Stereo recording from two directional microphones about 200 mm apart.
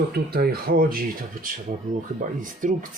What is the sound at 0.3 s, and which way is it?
Speech, 50° right (ahead or behind).